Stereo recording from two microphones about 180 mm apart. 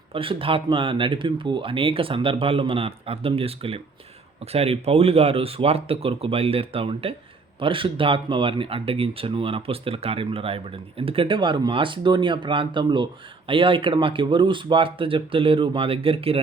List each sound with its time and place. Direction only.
0.1 s speech: 30° right (ahead or behind)